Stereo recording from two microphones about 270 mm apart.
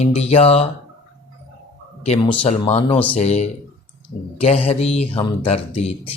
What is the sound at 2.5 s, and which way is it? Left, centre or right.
Speech, left.